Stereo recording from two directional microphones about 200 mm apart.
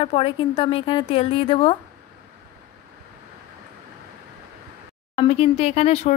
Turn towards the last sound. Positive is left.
turn(degrees=30)  # may be behind; listen again after turning